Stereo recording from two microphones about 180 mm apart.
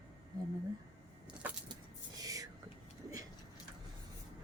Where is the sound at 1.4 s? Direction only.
10° right (ahead or behind).